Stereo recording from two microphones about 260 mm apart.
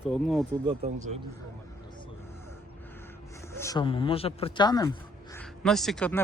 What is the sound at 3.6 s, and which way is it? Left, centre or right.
Speech, centre.